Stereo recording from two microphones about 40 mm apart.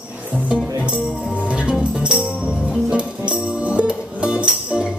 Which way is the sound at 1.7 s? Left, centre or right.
Right.